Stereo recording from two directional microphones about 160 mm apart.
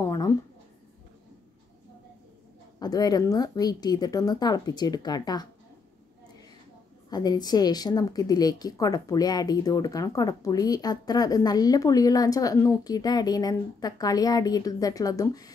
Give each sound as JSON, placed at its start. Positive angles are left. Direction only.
{"t": 0.0, "sound": "a sound", "side_deg": 20}
{"t": 2.8, "sound": "a woman's voice", "side_deg": 25}
{"t": 7.1, "sound": "a woman's voice", "side_deg": 25}